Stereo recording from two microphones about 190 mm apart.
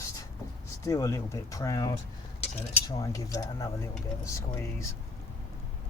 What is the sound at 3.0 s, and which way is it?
Speech, 20° left (ahead or behind).